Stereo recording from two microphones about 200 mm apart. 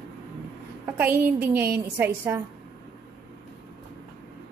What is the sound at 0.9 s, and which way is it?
A woman's voice, 10° right (ahead or behind).